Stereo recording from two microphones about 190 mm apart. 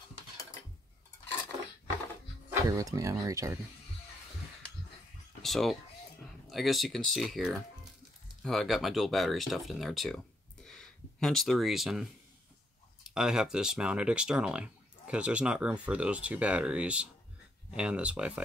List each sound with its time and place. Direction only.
2.7 s speech: 20° right (ahead or behind)
5.4 s a sound: centre (ahead or behind)
6.4 s speech: centre (ahead or behind)